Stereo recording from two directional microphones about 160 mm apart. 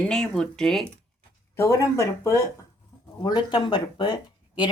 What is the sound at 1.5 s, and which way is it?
Speech, 15° left (ahead or behind).